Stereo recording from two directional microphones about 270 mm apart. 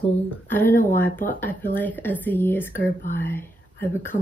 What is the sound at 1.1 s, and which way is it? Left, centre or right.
Speech, left.